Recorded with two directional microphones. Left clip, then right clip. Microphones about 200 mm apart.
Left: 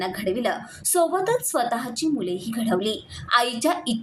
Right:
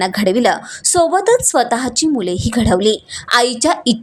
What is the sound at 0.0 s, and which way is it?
A woman's voice, 50° right (ahead or behind).